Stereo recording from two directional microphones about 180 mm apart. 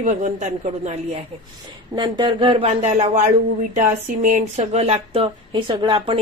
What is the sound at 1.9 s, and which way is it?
Speech, 25° right (ahead or behind).